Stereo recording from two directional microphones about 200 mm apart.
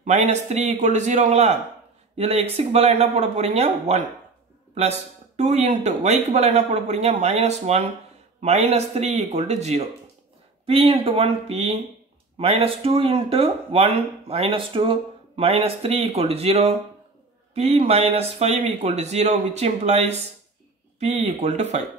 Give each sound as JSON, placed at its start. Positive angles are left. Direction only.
{"t": 0.0, "sound": "speech", "side_deg": -35}